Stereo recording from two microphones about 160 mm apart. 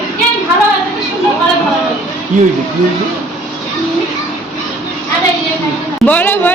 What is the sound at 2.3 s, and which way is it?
Speech, 50° right (ahead or behind).